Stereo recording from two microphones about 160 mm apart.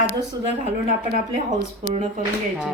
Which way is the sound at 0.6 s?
55° right (ahead or behind).